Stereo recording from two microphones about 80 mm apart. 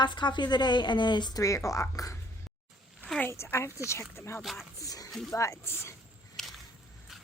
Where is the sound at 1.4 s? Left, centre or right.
Left.